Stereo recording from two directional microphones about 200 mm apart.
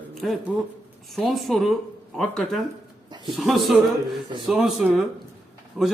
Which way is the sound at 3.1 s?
20° right (ahead or behind).